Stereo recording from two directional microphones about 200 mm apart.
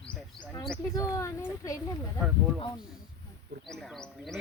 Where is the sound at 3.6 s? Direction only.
Centre (ahead or behind).